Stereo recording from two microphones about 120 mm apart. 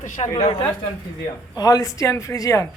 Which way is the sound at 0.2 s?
50° left (ahead or behind).